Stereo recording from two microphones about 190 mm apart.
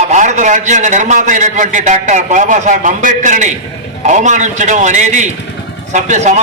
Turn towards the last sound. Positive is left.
turn(degrees=-40)  # may be behind; listen again after turning